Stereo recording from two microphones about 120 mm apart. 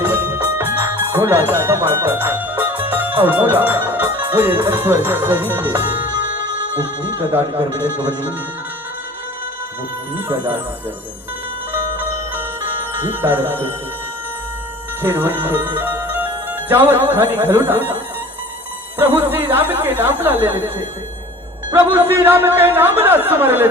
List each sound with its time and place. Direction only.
0.0 s music: 15° right (ahead or behind)
2.9 s speech: 15° right (ahead or behind)
7.2 s a man's voice: 15° right (ahead or behind)
10.2 s a man's voice: 15° right (ahead or behind)
11.9 s music: 15° right (ahead or behind)
13.2 s a man's voice: 15° right (ahead or behind)
15.0 s a man's voice: 15° right (ahead or behind)
18.9 s a man's voice: 15° right (ahead or behind)
21.7 s a man's voice: 20° right (ahead or behind)